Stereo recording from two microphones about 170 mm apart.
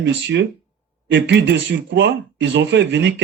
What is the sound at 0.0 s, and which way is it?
Speech, 90° right.